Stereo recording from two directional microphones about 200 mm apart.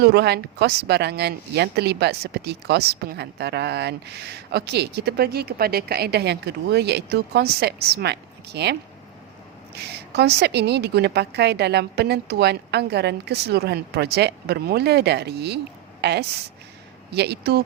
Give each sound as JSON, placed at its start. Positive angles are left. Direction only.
{"t": 0.0, "sound": "speech", "side_deg": -55}
{"t": 9.7, "sound": "speech", "side_deg": -55}